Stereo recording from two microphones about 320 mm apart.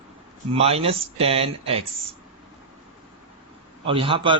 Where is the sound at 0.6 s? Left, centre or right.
Centre.